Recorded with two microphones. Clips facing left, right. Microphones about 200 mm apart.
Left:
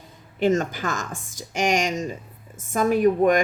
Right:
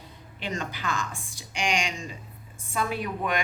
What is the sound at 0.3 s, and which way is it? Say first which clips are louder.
Speech: left 13 dB; 45° left (ahead or behind).